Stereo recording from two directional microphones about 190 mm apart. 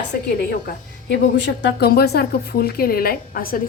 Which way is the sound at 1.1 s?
70° left (ahead or behind).